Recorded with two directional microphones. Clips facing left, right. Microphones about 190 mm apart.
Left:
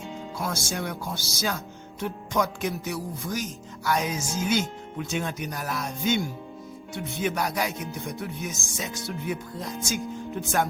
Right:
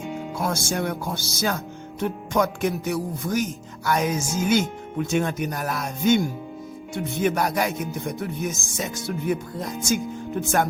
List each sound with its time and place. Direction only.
0.0 s music: 15° right (ahead or behind)
0.3 s speech: 50° right (ahead or behind)